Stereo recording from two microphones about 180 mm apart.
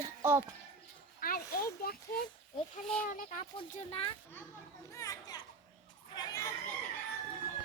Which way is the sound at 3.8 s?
35° left (ahead or behind).